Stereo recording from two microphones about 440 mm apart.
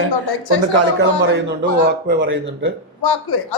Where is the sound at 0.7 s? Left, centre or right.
Right.